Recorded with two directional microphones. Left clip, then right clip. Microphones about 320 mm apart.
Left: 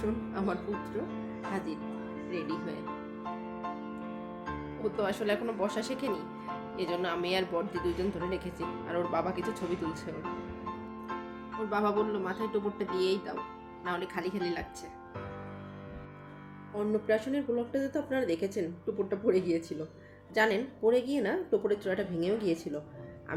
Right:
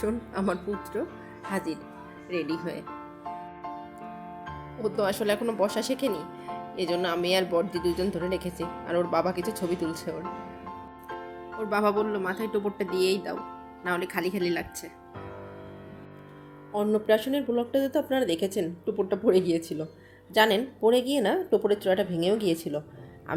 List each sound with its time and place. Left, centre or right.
0.0 s a woman's voice: right
2.3 s a woman's voice: right
4.8 s a woman's voice: right
11.7 s a woman's voice: right
16.7 s a woman's voice: right